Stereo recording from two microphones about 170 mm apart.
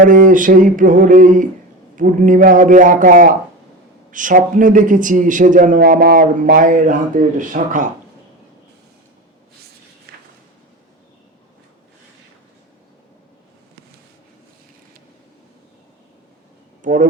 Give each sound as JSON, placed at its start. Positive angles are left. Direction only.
{"t": 0.0, "sound": "a man's voice", "side_deg": -50}
{"t": 10.1, "sound": "a sound", "side_deg": -70}
{"t": 16.8, "sound": "speech", "side_deg": -50}